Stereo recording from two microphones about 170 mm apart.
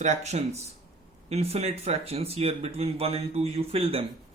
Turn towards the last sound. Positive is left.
turn(degrees=-35)  # may be behind; listen again after turning